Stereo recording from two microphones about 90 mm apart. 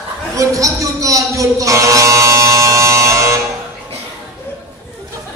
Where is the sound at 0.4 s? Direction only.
40° right (ahead or behind).